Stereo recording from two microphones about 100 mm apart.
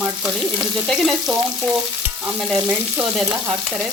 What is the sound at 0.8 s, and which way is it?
Frying, centre (ahead or behind).